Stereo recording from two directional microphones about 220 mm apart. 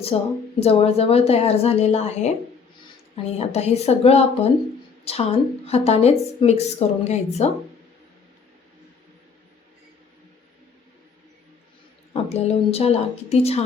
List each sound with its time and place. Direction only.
0.1 s a woman's voice: 25° left (ahead or behind)
12.1 s a woman's voice: 30° left (ahead or behind)